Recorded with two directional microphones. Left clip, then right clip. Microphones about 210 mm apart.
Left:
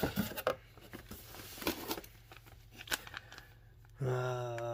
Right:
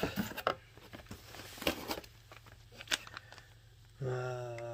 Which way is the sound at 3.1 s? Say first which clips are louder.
Left 2 dB; 10° right (ahead or behind).